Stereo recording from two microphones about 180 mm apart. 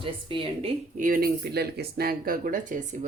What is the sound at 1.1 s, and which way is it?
Speech, 55° right (ahead or behind).